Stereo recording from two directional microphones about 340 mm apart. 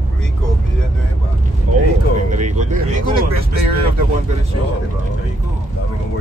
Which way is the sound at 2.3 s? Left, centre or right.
Right.